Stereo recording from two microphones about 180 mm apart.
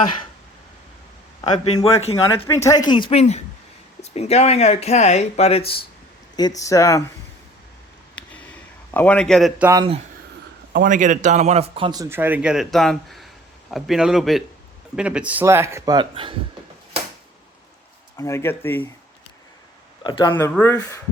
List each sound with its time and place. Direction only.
1.4 s speech: 30° left (ahead or behind)
2.5 s speech: 15° left (ahead or behind); by 5.8 s 35° left (ahead or behind)
6.3 s speech: 20° left (ahead or behind)
8.2 s a sound: 5° left (ahead or behind)
8.9 s a man's voice: 10° left (ahead or behind)
9.6 s speech: 15° right (ahead or behind)
10.7 s a man's voice: 50° right (ahead or behind)
11.9 s a man's voice: 15° right (ahead or behind)
16.0 s speech: 30° right (ahead or behind)
18.2 s speech: 15° left (ahead or behind)
20.1 s speech: 25° left (ahead or behind)
20.3 s speech: 10° left (ahead or behind)